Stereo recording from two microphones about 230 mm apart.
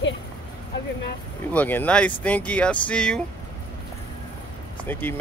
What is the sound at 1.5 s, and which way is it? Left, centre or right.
Speech, centre.